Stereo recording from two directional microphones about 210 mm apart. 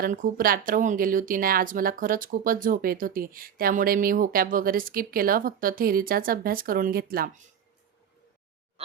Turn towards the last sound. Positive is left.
turn(degrees=-45)  # may be behind; listen again after turning